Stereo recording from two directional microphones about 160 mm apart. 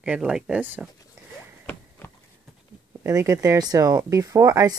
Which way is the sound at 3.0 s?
20° right (ahead or behind).